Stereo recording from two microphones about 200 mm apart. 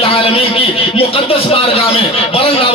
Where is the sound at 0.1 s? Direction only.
30° left (ahead or behind).